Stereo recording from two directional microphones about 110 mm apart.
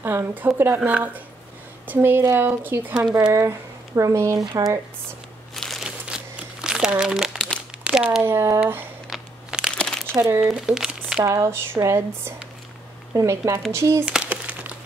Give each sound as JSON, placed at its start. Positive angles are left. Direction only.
{"t": 0.0, "sound": "a woman's voice", "side_deg": -20}
{"t": 5.5, "sound": "crumpling", "side_deg": 5}
{"t": 7.8, "sound": "a sound", "side_deg": -5}
{"t": 8.2, "sound": "a woman's voice", "side_deg": -25}
{"t": 9.1, "sound": "crumpling", "side_deg": -5}
{"t": 10.1, "sound": "a woman's voice", "side_deg": -25}
{"t": 10.5, "sound": "speech", "side_deg": -5}
{"t": 11.2, "sound": "a woman's voice", "side_deg": -25}
{"t": 14.0, "sound": "crumpling", "side_deg": -10}